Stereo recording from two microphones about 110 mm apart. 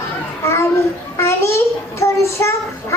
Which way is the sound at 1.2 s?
25° left (ahead or behind).